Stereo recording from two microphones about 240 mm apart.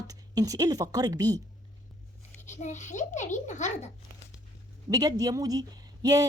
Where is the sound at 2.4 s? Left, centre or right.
Left.